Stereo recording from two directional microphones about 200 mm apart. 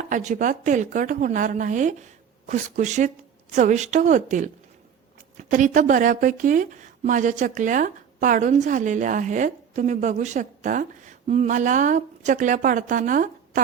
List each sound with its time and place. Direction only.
0.1 s a woman's voice: 40° right (ahead or behind)